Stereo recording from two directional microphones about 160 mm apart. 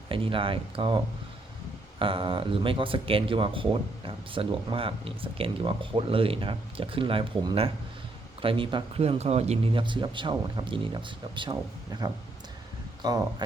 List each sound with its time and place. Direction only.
0.1 s speech: 35° right (ahead or behind)